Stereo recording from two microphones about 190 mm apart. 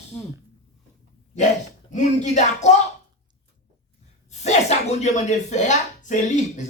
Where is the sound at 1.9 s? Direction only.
35° left (ahead or behind).